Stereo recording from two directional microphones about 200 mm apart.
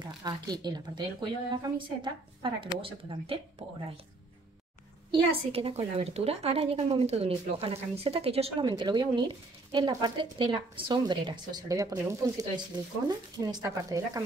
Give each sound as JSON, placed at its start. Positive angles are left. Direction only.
{"t": 0.0, "sound": "speech", "side_deg": -20}
{"t": 5.1, "sound": "speech", "side_deg": -30}